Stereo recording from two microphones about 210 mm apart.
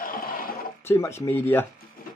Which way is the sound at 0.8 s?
10° left (ahead or behind).